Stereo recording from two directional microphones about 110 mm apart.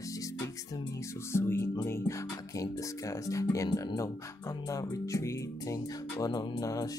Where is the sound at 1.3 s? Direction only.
25° left (ahead or behind).